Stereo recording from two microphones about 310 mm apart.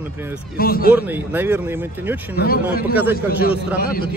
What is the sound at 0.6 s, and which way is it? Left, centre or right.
Speech, left.